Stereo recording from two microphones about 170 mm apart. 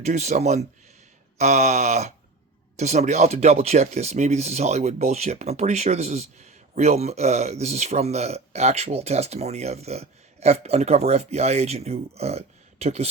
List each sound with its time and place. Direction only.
0.0 s speech: 40° right (ahead or behind)